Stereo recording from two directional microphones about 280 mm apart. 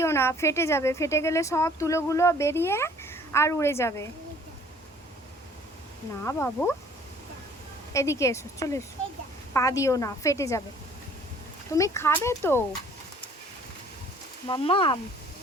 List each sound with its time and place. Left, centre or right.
0.0 s a woman's voice: centre
6.2 s a woman's voice: centre
7.9 s a woman's voice: centre
11.7 s a woman's voice: centre
14.4 s a woman's voice: centre